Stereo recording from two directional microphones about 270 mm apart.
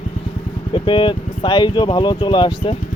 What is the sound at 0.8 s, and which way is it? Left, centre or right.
Speech, centre.